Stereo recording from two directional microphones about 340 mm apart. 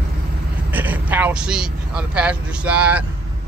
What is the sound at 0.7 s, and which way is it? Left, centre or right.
Speech, centre.